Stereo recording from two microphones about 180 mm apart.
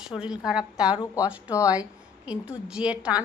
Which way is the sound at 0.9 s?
25° left (ahead or behind).